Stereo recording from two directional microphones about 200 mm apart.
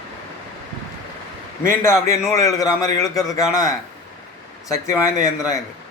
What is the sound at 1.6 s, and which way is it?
A man's voice, 15° left (ahead or behind).